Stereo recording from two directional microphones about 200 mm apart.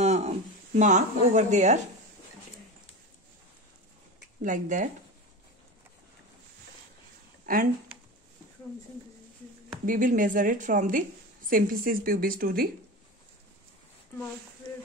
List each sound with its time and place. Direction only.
0.0 s speech: 35° right (ahead or behind)
4.4 s speech: 40° right (ahead or behind)
7.5 s speech: 45° right (ahead or behind)
9.8 s a woman's voice: 40° right (ahead or behind)